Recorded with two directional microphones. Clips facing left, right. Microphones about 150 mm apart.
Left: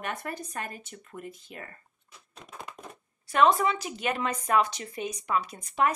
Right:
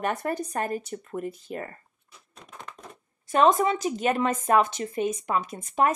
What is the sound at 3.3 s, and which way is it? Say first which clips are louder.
Speech: right 2 dB; 40° right (ahead or behind).